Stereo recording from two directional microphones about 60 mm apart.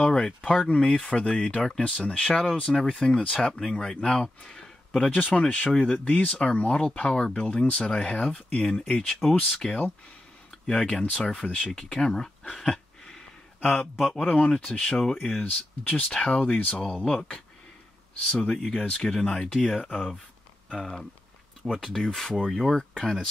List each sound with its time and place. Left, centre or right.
0.0 s speech: centre
8.8 s speech: centre
9.3 s speech: left
17.0 s speech: centre
20.7 s speech: centre